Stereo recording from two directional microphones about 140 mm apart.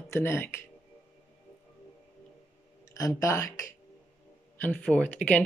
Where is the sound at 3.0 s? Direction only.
25° left (ahead or behind).